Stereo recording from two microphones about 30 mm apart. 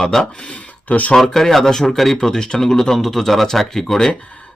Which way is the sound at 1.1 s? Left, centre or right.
Centre.